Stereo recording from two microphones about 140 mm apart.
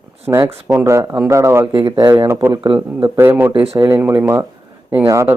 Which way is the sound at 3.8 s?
20° right (ahead or behind).